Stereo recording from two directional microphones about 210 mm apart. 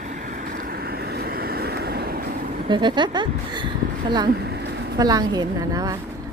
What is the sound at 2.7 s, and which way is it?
A woman's voice, 20° right (ahead or behind).